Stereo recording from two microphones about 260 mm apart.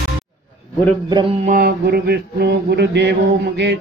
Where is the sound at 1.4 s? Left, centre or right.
Right.